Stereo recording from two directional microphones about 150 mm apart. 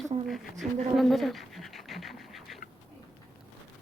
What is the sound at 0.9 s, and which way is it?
Dog, centre (ahead or behind).